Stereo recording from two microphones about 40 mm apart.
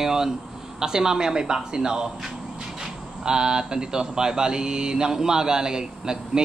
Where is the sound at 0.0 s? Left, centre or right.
Centre.